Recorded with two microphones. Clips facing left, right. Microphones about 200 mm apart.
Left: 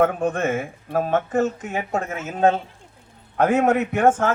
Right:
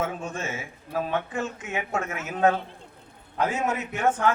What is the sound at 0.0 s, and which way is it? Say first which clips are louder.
Speech: left 10 dB; 55° left (ahead or behind).